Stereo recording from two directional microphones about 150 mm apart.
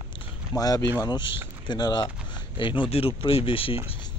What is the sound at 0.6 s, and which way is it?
Speech, 25° left (ahead or behind).